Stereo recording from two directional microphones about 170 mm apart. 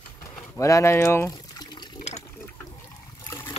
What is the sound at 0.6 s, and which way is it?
Speech, 20° left (ahead or behind).